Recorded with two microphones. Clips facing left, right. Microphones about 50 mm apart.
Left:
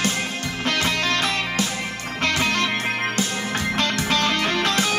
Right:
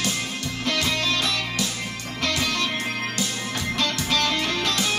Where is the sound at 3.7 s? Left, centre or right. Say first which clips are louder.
Left 1 dB; left.